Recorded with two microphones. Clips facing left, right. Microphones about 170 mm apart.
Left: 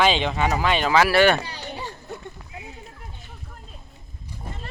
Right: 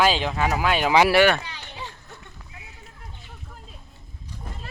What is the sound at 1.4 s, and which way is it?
Children playing, 40° left (ahead or behind).